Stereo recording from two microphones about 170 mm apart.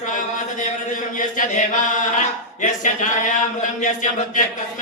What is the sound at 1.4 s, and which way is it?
Chant, 50° left (ahead or behind).